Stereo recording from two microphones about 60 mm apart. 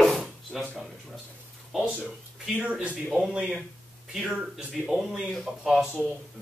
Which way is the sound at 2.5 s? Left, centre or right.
Right.